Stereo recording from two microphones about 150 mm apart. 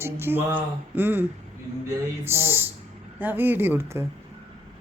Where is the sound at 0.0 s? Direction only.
15° right (ahead or behind).